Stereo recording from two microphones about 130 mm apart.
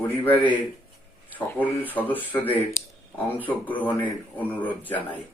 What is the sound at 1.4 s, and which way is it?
Speech, 15° left (ahead or behind).